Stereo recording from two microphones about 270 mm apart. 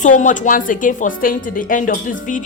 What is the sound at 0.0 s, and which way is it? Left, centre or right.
Speech, left.